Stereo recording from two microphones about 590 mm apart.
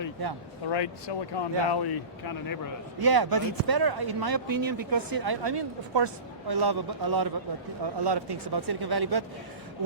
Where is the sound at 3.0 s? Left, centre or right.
Right.